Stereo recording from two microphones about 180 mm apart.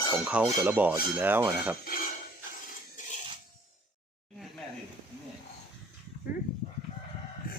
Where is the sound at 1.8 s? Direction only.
55° left (ahead or behind).